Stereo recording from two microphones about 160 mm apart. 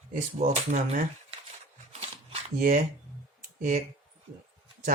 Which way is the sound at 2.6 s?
55° right (ahead or behind).